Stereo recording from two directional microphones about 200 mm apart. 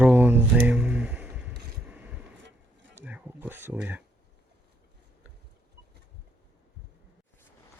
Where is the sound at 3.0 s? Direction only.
10° right (ahead or behind).